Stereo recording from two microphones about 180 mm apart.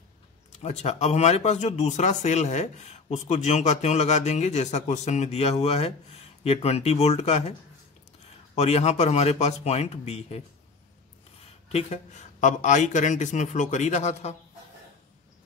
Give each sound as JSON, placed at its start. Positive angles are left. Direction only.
{"t": 0.6, "sound": "speech", "side_deg": 35}
{"t": 8.5, "sound": "speech", "side_deg": 35}
{"t": 11.7, "sound": "speech", "side_deg": 40}